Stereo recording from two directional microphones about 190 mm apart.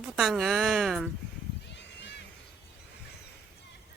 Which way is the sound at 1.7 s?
65° left (ahead or behind).